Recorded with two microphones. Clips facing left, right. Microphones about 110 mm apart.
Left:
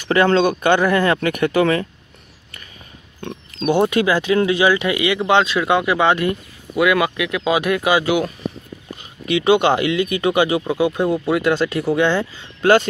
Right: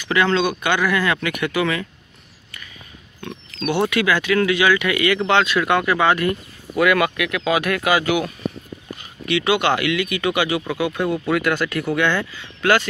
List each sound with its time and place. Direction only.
0.1 s speech: 35° left (ahead or behind)
3.5 s speech: 40° left (ahead or behind); by 8.3 s 20° left (ahead or behind)
9.3 s speech: 30° left (ahead or behind)